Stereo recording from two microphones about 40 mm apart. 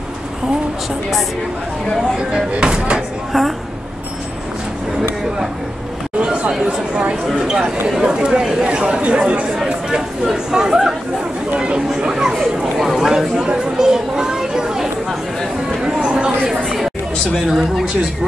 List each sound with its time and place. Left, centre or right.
2.1 s speech: right
3.3 s speech: centre
6.1 s chatter: right
6.6 s speech: right
7.3 s speech: centre
8.6 s speech: right
9.6 s chatter: centre
11.5 s a sound: right
12.5 s chatter: centre
15.8 s a sound: right
17.5 s speech: centre